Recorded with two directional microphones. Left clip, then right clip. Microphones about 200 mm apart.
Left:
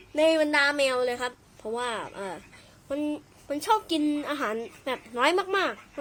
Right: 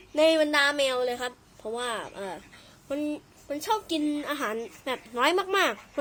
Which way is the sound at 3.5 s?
10° left (ahead or behind).